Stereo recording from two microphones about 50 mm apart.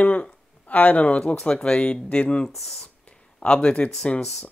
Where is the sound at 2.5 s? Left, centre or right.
Centre.